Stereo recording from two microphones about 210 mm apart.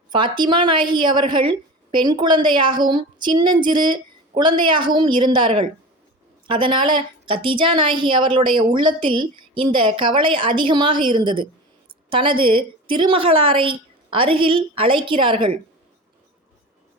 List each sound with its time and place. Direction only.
0.1 s a woman's voice: 20° right (ahead or behind)